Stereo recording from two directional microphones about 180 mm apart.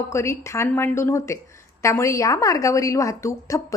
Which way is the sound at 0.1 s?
15° left (ahead or behind).